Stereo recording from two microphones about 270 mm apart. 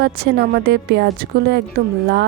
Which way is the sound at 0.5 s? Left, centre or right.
Right.